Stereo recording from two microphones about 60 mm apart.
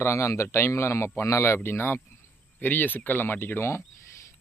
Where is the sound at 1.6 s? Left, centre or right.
Left.